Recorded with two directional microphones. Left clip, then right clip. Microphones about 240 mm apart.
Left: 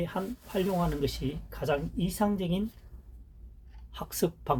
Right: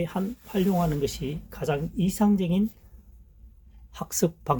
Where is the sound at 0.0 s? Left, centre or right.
Right.